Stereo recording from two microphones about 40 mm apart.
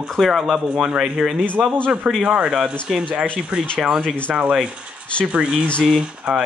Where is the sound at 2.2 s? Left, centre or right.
Right.